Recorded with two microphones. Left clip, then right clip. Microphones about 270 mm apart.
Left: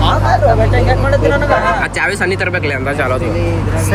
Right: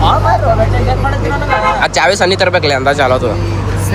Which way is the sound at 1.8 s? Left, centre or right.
Centre.